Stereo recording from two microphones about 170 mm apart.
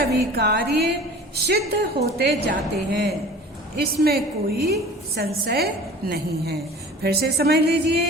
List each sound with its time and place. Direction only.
0.1 s a woman's voice: 75° right (ahead or behind)